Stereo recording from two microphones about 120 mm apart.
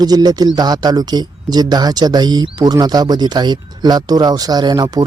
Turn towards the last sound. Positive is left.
turn(degrees=-35)  # may be behind; listen again after turning